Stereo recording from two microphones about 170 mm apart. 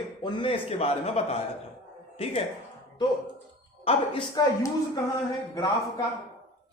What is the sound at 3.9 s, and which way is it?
Speech, 35° left (ahead or behind).